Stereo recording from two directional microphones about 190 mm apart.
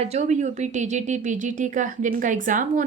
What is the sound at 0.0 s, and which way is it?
A woman's voice, 35° right (ahead or behind).